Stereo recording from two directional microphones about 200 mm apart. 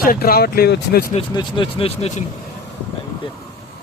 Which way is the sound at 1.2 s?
25° left (ahead or behind).